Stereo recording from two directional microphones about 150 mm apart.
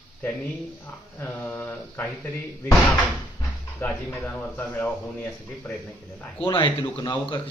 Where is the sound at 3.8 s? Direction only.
10° left (ahead or behind).